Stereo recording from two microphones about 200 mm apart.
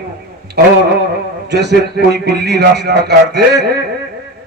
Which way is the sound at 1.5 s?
55° right (ahead or behind).